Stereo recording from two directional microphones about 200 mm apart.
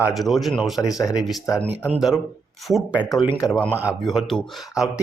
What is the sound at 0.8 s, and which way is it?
Speech, 15° left (ahead or behind).